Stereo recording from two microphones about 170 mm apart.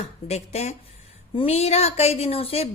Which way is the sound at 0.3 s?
40° left (ahead or behind).